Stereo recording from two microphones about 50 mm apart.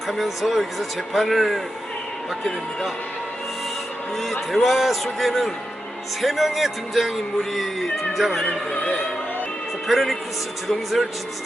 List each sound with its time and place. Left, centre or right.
0.1 s a man's voice: centre
4.2 s a man's voice: centre
8.4 s speech: left
9.8 s a man's voice: centre